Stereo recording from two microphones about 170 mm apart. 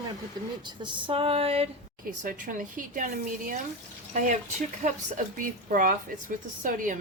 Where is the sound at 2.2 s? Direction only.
50° right (ahead or behind).